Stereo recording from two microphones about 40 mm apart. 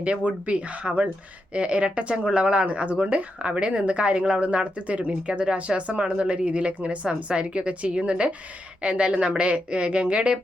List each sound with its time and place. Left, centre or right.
0.0 s a woman's voice: right